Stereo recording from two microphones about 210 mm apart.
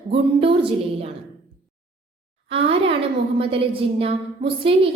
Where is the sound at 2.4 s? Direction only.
25° right (ahead or behind).